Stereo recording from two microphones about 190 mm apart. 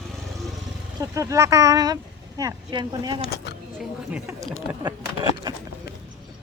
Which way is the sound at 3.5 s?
60° left (ahead or behind).